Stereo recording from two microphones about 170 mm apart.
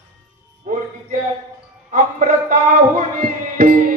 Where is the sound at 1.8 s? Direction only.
50° right (ahead or behind).